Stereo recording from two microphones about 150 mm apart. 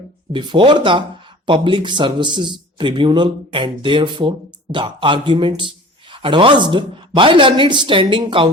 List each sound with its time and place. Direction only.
0.3 s speech: 30° right (ahead or behind)